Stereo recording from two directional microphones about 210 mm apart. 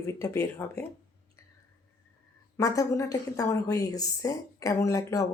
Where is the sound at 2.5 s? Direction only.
15° left (ahead or behind).